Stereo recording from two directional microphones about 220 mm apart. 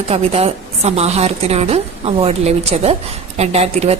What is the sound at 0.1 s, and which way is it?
A woman's voice, 25° right (ahead or behind).